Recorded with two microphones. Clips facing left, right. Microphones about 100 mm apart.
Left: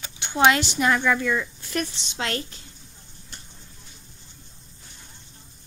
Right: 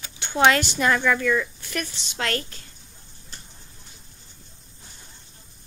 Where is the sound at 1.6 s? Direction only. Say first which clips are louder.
Left 3 dB; 30° left (ahead or behind).